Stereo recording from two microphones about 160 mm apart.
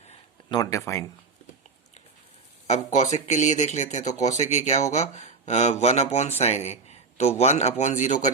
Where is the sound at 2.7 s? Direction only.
45° left (ahead or behind).